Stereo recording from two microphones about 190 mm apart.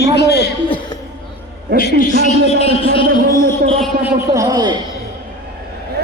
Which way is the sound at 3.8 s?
10° right (ahead or behind).